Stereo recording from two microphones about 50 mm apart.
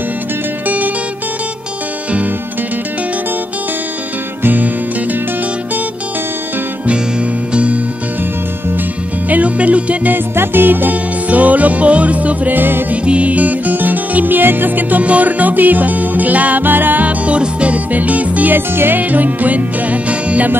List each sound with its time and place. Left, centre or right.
0.7 s music: right
4.4 s music: right
7.5 s music: right
9.3 s music: right
10.1 s music: right
12.9 s music: right